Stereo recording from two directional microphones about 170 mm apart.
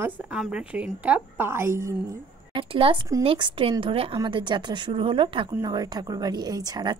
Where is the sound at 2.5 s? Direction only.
30° right (ahead or behind).